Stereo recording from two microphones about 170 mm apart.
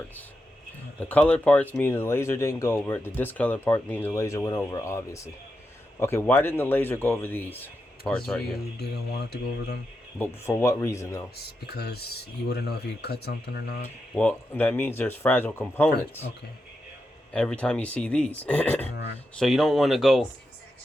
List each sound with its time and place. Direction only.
0.9 s speech: 10° left (ahead or behind)
8.8 s speech: 75° left (ahead or behind)
10.2 s speech: 15° left (ahead or behind)
11.4 s speech: 70° left (ahead or behind)
14.2 s speech: 10° left (ahead or behind)
17.3 s speech: 5° left (ahead or behind)